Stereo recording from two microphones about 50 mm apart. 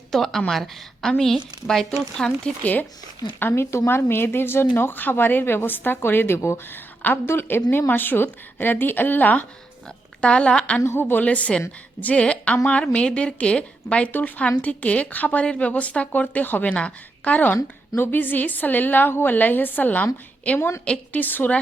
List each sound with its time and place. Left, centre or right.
0.1 s a woman's voice: centre
3.4 s speech: left
10.2 s a woman's voice: left
16.7 s a woman's voice: left
17.4 s a woman's voice: left